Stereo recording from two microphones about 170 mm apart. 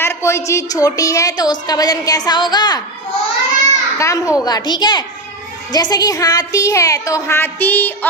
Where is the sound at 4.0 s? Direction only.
20° left (ahead or behind).